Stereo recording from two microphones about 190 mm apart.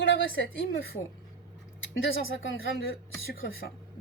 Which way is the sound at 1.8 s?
80° left.